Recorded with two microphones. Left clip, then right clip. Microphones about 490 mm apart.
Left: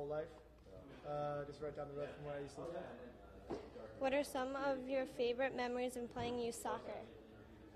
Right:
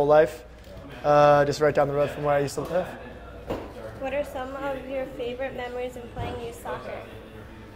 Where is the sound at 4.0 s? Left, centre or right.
Left.